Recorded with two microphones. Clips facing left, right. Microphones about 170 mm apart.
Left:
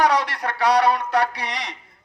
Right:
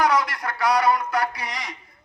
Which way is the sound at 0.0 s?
70° left (ahead or behind).